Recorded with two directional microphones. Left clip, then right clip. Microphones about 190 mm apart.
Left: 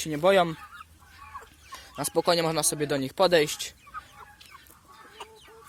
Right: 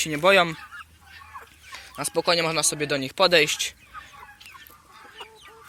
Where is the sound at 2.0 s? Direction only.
25° left (ahead or behind).